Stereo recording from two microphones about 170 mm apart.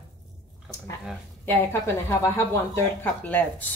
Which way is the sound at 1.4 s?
15° left (ahead or behind).